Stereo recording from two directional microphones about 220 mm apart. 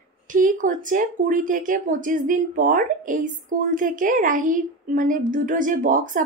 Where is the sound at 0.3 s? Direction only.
35° right (ahead or behind).